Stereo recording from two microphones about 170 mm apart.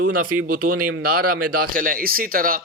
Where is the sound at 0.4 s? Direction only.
55° right (ahead or behind).